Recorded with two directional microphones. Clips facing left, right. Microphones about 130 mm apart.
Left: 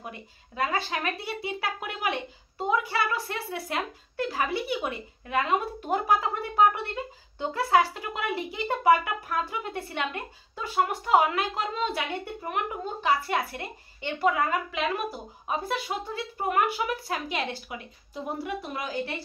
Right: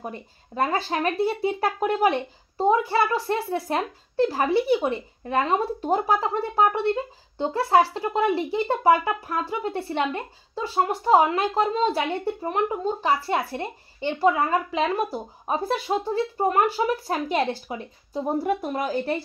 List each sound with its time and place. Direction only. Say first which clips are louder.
0.0 s speech: right 6 dB; 40° right (ahead or behind)